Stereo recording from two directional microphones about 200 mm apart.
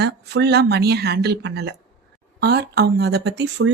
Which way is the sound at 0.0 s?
55° right (ahead or behind).